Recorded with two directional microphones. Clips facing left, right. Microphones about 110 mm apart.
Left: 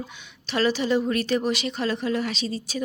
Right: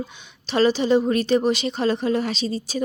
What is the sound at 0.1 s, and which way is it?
A woman's voice, 25° right (ahead or behind).